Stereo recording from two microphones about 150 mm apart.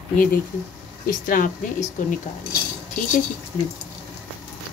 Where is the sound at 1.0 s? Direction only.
65° left (ahead or behind).